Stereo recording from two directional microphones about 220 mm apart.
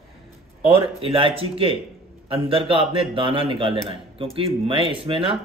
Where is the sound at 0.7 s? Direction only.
25° right (ahead or behind).